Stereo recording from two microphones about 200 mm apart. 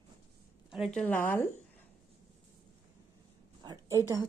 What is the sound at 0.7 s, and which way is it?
Speech, centre (ahead or behind).